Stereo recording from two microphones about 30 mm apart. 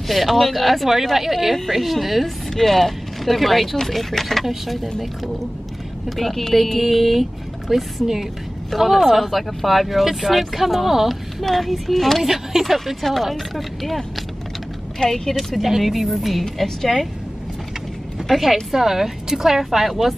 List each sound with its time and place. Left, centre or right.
0.4 s speech: centre
6.0 s speech: centre
11.4 s speech: centre
15.0 s speech: centre
15.5 s speech: centre
16.6 s speech: centre
18.3 s a woman's voice: centre